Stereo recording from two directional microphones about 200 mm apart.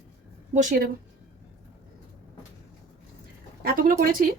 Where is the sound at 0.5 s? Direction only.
45° right (ahead or behind).